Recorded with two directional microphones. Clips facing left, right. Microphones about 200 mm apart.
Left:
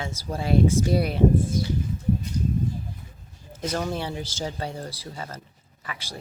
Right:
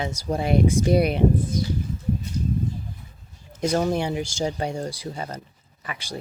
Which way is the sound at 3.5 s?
15° right (ahead or behind).